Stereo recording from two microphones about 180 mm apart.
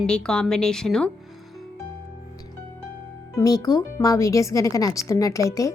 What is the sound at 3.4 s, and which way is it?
Speech, 20° left (ahead or behind).